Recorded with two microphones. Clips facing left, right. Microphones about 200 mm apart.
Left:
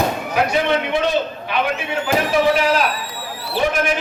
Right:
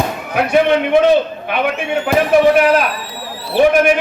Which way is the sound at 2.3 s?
55° right (ahead or behind).